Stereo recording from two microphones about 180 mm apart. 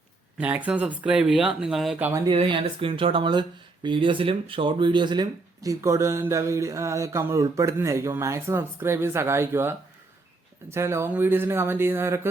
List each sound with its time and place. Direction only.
0.3 s speech: 10° right (ahead or behind)
2.2 s speech: 30° right (ahead or behind)